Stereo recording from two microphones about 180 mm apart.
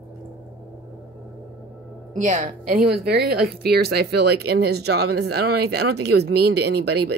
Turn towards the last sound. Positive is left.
turn(degrees=-65)  # may be behind; listen again after turning